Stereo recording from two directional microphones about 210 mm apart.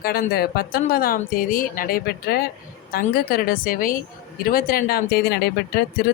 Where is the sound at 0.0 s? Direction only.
45° left (ahead or behind).